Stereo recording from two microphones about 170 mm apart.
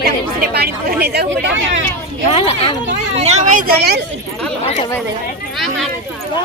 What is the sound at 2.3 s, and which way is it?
Speech, 35° left (ahead or behind).